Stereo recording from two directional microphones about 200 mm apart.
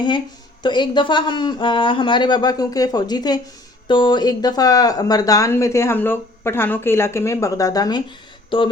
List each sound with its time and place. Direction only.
0.6 s speech: 20° left (ahead or behind)